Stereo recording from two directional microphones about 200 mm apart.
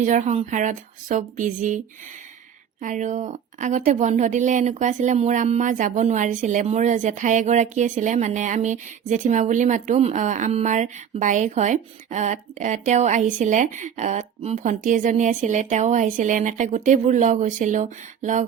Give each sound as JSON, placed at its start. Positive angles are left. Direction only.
{"t": 0.0, "sound": "a woman's voice", "side_deg": -40}
{"t": 2.8, "sound": "a woman's voice", "side_deg": -35}